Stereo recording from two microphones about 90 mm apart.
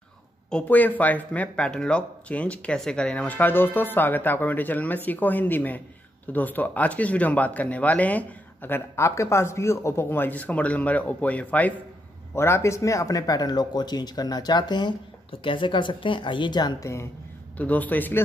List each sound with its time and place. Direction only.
0.5 s speech: 15° left (ahead or behind)
12.4 s speech: 30° left (ahead or behind); by 15.0 s 55° left (ahead or behind)
15.4 s speech: 65° left (ahead or behind)
16.8 s speech: 35° left (ahead or behind)
17.6 s speech: 20° left (ahead or behind)